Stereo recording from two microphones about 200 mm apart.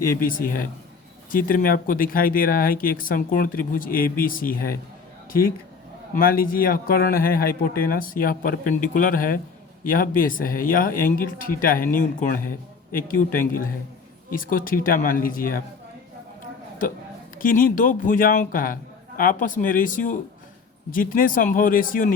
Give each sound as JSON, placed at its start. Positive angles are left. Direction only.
{"t": 0.2, "sound": "speech", "side_deg": 45}
{"t": 6.1, "sound": "speech", "side_deg": 45}
{"t": 17.3, "sound": "speech", "side_deg": 45}